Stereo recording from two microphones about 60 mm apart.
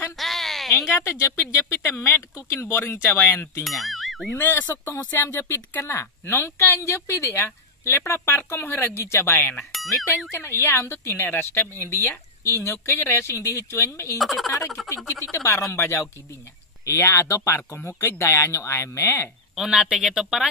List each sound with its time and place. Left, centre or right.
0.2 s a sound: centre
0.9 s a woman's voice: left
3.6 s speech: centre
4.4 s a woman's voice: left
5.1 s a woman's voice: left
6.8 s a woman's voice: left
9.7 s speech: centre
10.3 s a woman's voice: left
12.4 s a woman's voice: left
12.7 s a woman's voice: left
14.1 s speech: centre
15.0 s a woman's voice: left
18.2 s a woman's voice: left
19.5 s speech: centre